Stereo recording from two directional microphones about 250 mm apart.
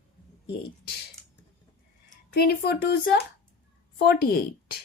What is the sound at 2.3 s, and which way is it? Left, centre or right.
Speech, left.